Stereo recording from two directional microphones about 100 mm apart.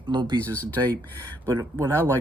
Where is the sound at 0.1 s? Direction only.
50° right (ahead or behind).